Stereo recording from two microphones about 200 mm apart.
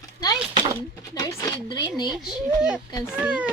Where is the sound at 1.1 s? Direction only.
15° left (ahead or behind).